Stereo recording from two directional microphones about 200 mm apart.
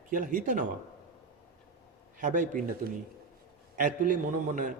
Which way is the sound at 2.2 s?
40° right (ahead or behind).